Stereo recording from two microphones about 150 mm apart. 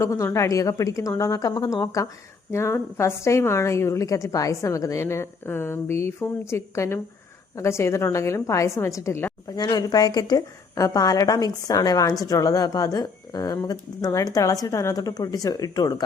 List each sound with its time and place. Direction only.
0.0 s a woman's voice: 20° left (ahead or behind)